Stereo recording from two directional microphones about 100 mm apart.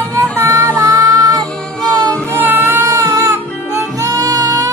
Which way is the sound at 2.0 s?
15° left (ahead or behind).